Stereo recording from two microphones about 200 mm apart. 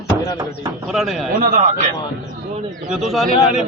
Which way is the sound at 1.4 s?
40° right (ahead or behind).